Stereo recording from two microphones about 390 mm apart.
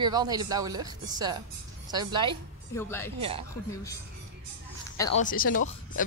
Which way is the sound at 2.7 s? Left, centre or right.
Centre.